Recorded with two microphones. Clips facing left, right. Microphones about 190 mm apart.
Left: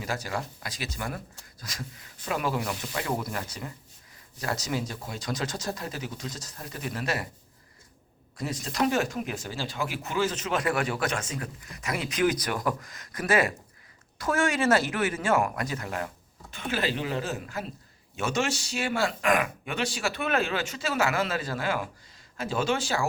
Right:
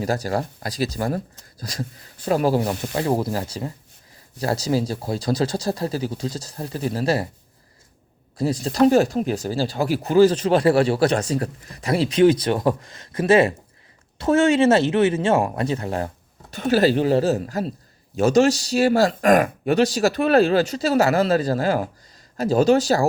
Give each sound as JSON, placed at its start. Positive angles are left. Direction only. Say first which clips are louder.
{"t": 0.0, "sound": "speech", "louder": "right 9 dB", "side_deg": -40}
{"t": 8.4, "sound": "speech", "louder": "right 10 dB", "side_deg": -35}